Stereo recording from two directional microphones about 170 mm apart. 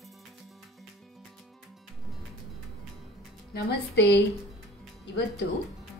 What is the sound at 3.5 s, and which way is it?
Speech, 90° left.